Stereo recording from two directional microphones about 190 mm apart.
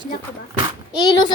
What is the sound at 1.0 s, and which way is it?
Speech, 20° left (ahead or behind).